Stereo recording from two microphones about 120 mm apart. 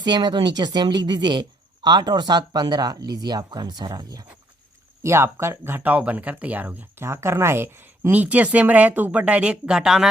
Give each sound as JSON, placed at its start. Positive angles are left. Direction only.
{"t": 0.0, "sound": "a woman's voice", "side_deg": -35}
{"t": 5.0, "sound": "speech", "side_deg": -20}